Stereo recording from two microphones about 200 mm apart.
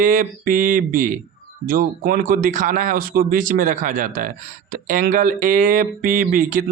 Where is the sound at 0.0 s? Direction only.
45° right (ahead or behind).